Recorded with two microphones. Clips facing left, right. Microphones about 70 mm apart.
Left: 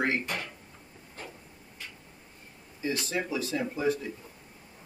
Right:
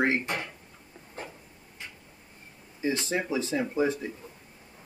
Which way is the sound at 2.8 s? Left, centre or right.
Right.